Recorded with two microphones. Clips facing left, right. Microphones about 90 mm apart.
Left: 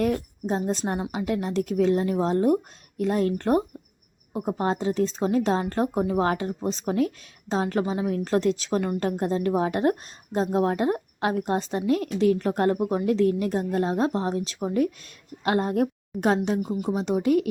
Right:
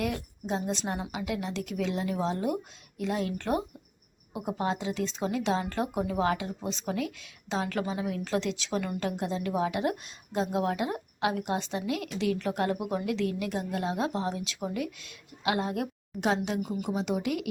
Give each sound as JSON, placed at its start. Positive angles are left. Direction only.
{"t": 0.0, "sound": "a woman's voice", "side_deg": 40}
{"t": 16.6, "sound": "a woman's voice", "side_deg": 30}